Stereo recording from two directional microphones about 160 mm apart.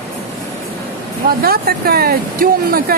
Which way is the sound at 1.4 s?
70° right (ahead or behind).